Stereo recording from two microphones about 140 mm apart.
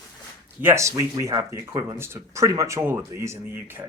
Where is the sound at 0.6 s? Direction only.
20° right (ahead or behind).